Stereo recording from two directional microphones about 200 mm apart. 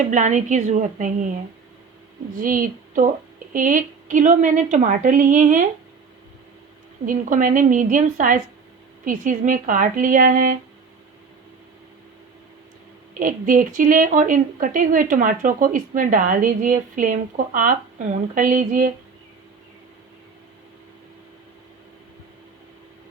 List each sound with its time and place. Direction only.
0.0 s a woman's voice: 40° right (ahead or behind)
2.3 s a woman's voice: 45° right (ahead or behind)
7.0 s a woman's voice: 40° right (ahead or behind)
13.1 s a woman's voice: 40° right (ahead or behind)